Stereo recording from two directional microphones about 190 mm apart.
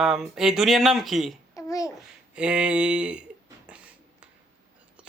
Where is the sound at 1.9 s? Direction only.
5° right (ahead or behind).